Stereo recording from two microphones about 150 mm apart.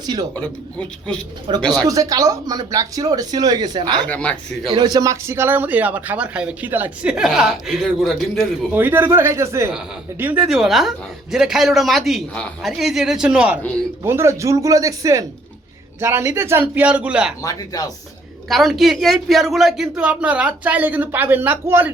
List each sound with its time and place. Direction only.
0.0 s speech: 25° right (ahead or behind)
0.3 s a man's voice: 10° left (ahead or behind)
1.5 s speech: 35° right (ahead or behind)
4.0 s a man's voice: 10° left (ahead or behind)
4.7 s speech: 25° right (ahead or behind); by 8.4 s centre (ahead or behind)
8.7 s a woman's voice: 15° right (ahead or behind)
14.0 s speech: 15° right (ahead or behind)
17.4 s speech: 25° left (ahead or behind)
18.4 s speech: centre (ahead or behind)